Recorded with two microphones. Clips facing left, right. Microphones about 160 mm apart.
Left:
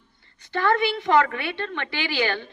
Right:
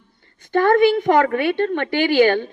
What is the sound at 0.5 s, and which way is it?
A woman's voice, 50° right (ahead or behind).